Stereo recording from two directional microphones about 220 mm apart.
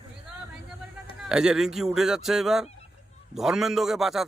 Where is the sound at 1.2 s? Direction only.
5° right (ahead or behind).